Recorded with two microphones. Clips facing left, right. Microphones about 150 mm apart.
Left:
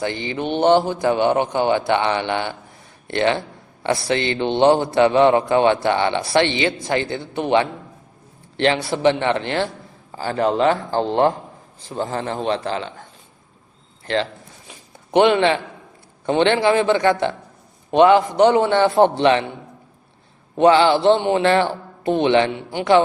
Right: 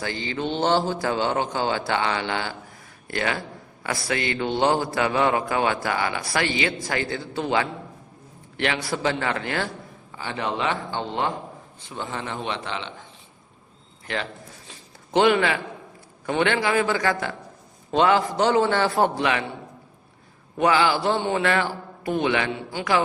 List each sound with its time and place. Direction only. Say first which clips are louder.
0.0 s a man's voice: left 4 dB; 20° left (ahead or behind)
10.1 s a man's voice: left 9 dB; 35° left (ahead or behind)
14.7 s a sound: left 5 dB; 20° left (ahead or behind)
16.2 s a man's voice: left 6 dB; 25° left (ahead or behind)
20.6 s a man's voice: left 7 dB; 30° left (ahead or behind)